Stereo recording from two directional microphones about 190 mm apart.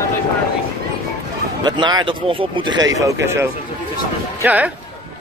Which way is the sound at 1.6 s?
20° right (ahead or behind).